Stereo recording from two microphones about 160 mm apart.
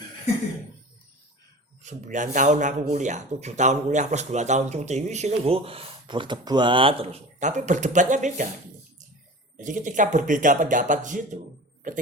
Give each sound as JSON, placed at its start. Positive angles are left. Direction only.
{"t": 1.8, "sound": "speech", "side_deg": -50}
{"t": 9.6, "sound": "speech", "side_deg": -50}